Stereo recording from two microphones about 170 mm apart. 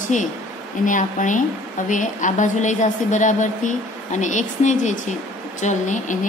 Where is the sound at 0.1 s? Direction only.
45° left (ahead or behind).